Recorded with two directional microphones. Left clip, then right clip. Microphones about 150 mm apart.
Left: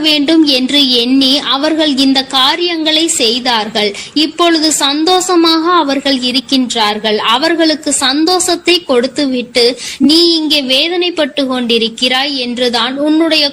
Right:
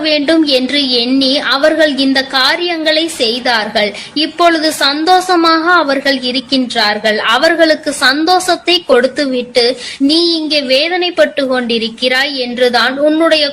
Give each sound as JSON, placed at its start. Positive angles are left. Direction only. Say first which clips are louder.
{"t": 0.0, "sound": "a woman's voice", "louder": "left 1 dB", "side_deg": 40}